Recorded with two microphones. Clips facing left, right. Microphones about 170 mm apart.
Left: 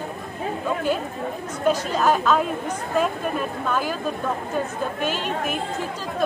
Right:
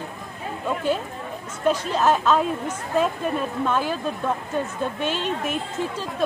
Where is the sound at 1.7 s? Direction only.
5° left (ahead or behind).